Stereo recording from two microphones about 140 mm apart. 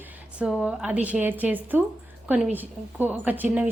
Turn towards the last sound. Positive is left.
turn(degrees=-10)  # may be behind; listen again after turning